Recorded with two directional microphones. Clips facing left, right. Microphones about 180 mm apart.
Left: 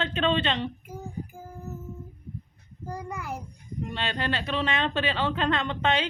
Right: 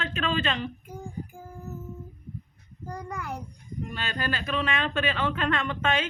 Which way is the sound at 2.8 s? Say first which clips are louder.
Left 1 dB; 5° left (ahead or behind).